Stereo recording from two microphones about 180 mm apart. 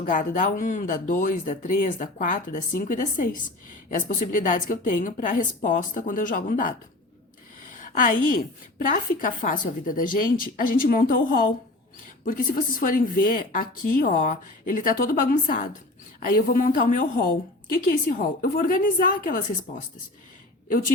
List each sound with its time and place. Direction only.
0.0 s a woman's voice: 45° left (ahead or behind)
12.2 s a woman's voice: 50° left (ahead or behind)